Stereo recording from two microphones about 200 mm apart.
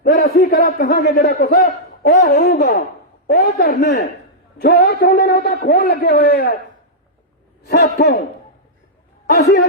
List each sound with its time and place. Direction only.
0.0 s a man's voice: 45° left (ahead or behind)
1.5 s a man's voice: 45° left (ahead or behind)
7.7 s a man's voice: 55° left (ahead or behind)
9.3 s a man's voice: 55° left (ahead or behind)